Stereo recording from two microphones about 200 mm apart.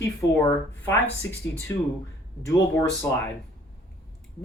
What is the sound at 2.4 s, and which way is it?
Speech, 15° left (ahead or behind).